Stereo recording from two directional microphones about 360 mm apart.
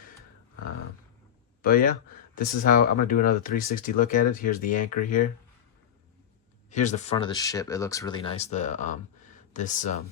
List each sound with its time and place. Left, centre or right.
1.6 s speech: left
6.7 s speech: centre